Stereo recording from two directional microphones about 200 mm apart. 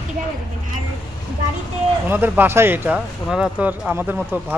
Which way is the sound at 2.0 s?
10° right (ahead or behind).